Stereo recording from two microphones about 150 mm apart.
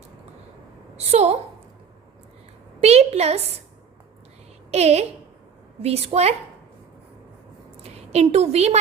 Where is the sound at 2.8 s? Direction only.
45° right (ahead or behind).